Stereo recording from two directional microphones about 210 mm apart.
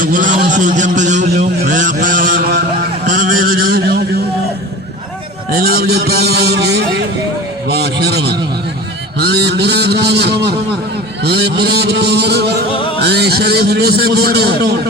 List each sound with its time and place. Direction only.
0.0 s a sound: 40° right (ahead or behind)
3.1 s a man's voice: 40° right (ahead or behind)
5.5 s a man's voice: 50° right (ahead or behind)
12.7 s music: 25° left (ahead or behind)
13.0 s a man's voice: 50° right (ahead or behind)